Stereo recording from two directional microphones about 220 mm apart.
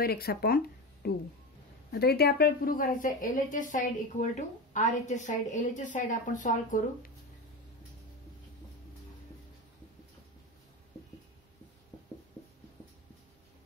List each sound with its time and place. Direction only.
0.0 s a woman's voice: 45° left (ahead or behind)